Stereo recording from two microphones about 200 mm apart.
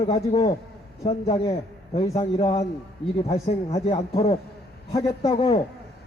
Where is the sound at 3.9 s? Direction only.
30° left (ahead or behind).